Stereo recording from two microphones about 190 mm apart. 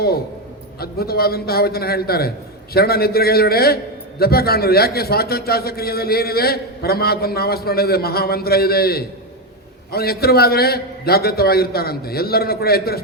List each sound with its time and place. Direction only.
0.8 s a man's voice: 55° left (ahead or behind)